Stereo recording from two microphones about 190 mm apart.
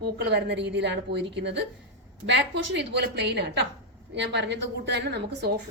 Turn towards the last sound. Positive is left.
turn(degrees=-60)  # may be behind; listen again after turning